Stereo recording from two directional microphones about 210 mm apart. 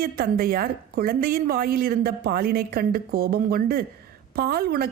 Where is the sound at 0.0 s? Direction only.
45° right (ahead or behind).